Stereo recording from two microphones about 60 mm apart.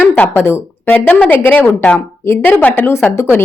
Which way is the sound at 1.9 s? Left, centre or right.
Left.